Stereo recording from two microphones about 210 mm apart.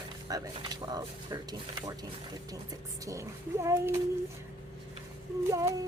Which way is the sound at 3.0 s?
15° right (ahead or behind).